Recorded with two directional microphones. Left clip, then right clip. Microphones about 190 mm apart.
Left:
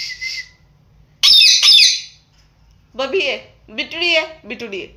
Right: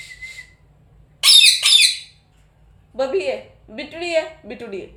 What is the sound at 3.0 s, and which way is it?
A woman's voice, 5° right (ahead or behind).